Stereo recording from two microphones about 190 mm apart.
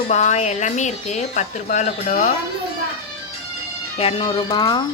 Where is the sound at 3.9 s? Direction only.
30° left (ahead or behind).